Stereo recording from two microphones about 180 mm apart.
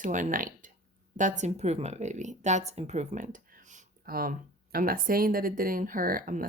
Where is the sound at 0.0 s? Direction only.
45° right (ahead or behind).